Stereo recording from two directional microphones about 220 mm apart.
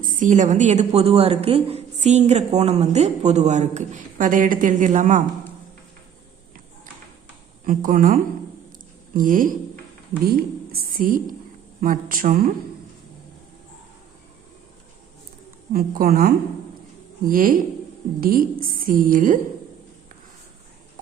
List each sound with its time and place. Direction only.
0.2 s a woman's voice: 35° right (ahead or behind)
7.6 s a woman's voice: 40° right (ahead or behind)
15.7 s a woman's voice: 45° right (ahead or behind)